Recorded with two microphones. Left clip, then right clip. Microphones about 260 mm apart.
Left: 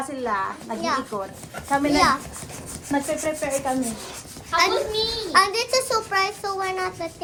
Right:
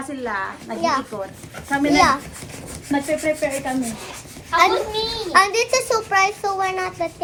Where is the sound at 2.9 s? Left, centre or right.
Centre.